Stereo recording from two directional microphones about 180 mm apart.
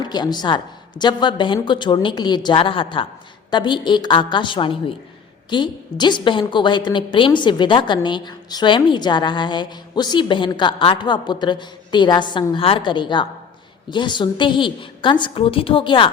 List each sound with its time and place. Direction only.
0.0 s a woman's voice: 25° left (ahead or behind)